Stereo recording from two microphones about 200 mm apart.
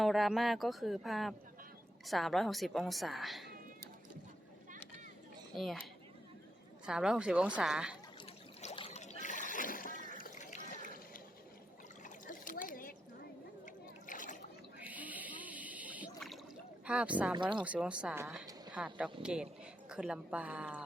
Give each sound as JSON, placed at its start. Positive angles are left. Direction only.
{"t": 0.0, "sound": "speech", "side_deg": 0}
{"t": 5.5, "sound": "speech", "side_deg": 0}
{"t": 6.8, "sound": "speech", "side_deg": -5}
{"t": 8.6, "sound": "a sound", "side_deg": 30}
{"t": 14.1, "sound": "a sound", "side_deg": 40}
{"t": 14.8, "sound": "a sound", "side_deg": -10}
{"t": 16.8, "sound": "a woman's voice", "side_deg": -5}
{"t": 17.3, "sound": "speech", "side_deg": -25}
{"t": 17.6, "sound": "a woman's voice", "side_deg": -5}